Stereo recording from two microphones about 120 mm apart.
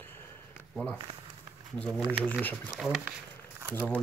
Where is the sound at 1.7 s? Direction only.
5° left (ahead or behind).